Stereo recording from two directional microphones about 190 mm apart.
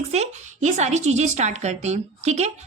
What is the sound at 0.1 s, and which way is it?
A woman's voice, 35° right (ahead or behind).